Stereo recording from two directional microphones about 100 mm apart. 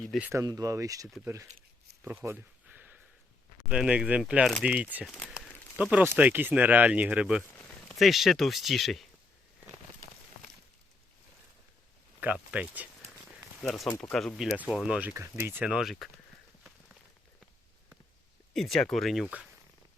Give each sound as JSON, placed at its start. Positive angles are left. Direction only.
{"t": 0.3, "sound": "speech", "side_deg": -35}
{"t": 2.0, "sound": "a sound", "side_deg": -20}
{"t": 3.7, "sound": "speech", "side_deg": -10}
{"t": 5.0, "sound": "speech", "side_deg": -5}
{"t": 5.8, "sound": "speech", "side_deg": -15}
{"t": 7.9, "sound": "speech", "side_deg": 0}
{"t": 12.2, "sound": "speech", "side_deg": -15}
{"t": 13.6, "sound": "speech", "side_deg": 5}
{"t": 14.3, "sound": "speech", "side_deg": -5}
{"t": 15.1, "sound": "speech", "side_deg": -25}
{"t": 15.7, "sound": "speech", "side_deg": 0}
{"t": 18.5, "sound": "speech", "side_deg": 0}